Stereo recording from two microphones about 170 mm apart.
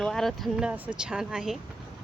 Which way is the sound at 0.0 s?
Centre (ahead or behind).